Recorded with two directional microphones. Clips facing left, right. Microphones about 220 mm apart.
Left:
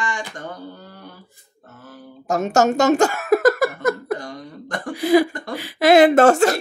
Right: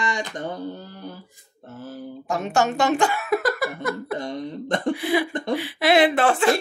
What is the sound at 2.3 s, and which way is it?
Speech, 45° left (ahead or behind).